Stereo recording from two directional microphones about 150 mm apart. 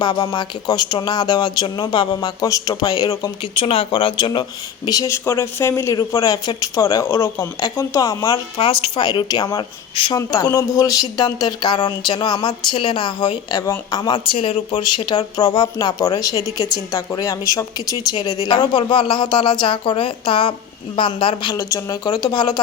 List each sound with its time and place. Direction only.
0.0 s speech: 30° left (ahead or behind)
3.6 s speech: 35° left (ahead or behind)
8.5 s speech: 35° left (ahead or behind)